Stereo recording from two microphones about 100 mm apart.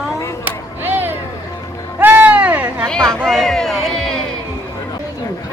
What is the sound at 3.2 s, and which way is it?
Speech, 5° left (ahead or behind).